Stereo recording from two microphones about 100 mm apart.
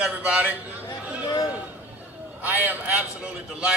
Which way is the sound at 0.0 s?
10° right (ahead or behind).